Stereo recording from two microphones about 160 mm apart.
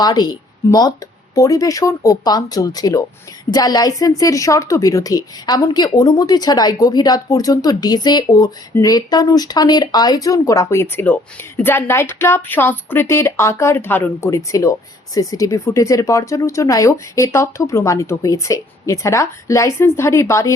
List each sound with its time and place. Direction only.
0.0 s a woman's voice: 25° left (ahead or behind)